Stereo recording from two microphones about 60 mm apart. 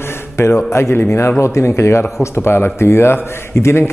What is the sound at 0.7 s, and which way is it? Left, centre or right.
Speech, left.